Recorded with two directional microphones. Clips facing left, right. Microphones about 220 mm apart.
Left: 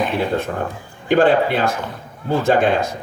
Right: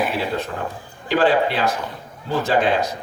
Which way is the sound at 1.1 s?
55° left (ahead or behind).